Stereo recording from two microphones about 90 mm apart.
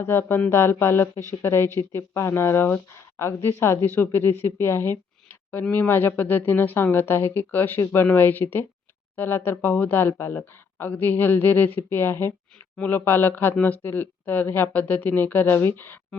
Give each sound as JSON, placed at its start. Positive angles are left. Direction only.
{"t": 0.0, "sound": "speech", "side_deg": 25}